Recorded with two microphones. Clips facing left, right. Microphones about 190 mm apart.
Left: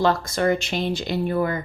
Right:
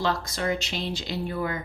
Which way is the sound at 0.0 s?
50° left (ahead or behind).